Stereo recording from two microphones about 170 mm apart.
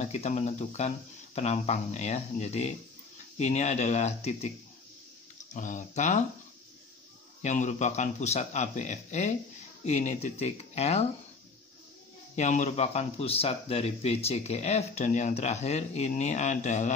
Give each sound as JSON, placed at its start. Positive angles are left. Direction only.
{"t": 0.0, "sound": "speech", "side_deg": 40}
{"t": 5.5, "sound": "speech", "side_deg": 45}
{"t": 7.4, "sound": "speech", "side_deg": 45}
{"t": 12.4, "sound": "speech", "side_deg": 45}